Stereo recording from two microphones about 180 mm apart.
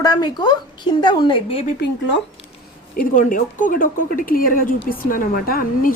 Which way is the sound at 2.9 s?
50° left (ahead or behind).